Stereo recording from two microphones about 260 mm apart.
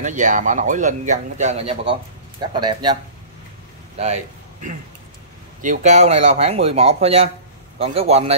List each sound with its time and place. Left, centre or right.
0.0 s a man's voice: right
5.6 s a man's voice: right